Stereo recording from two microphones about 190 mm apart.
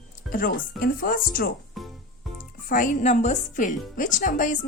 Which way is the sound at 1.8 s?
Centre (ahead or behind).